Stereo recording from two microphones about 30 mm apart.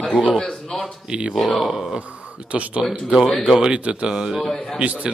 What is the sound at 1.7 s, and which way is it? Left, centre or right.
Speech, centre.